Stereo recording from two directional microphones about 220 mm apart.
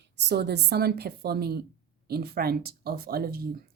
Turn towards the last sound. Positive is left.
turn(degrees=-45)  # may be behind; listen again after turning